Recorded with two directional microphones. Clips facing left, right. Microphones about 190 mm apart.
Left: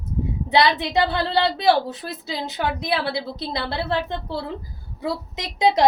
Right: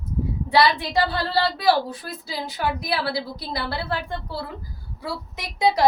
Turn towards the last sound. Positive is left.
turn(degrees=20)  # may be behind; listen again after turning